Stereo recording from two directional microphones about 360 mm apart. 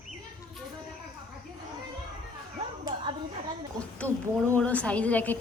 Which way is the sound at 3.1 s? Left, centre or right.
Centre.